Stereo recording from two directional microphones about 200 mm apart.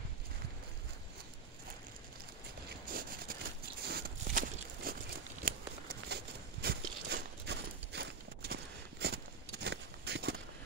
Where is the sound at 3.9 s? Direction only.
50° right (ahead or behind).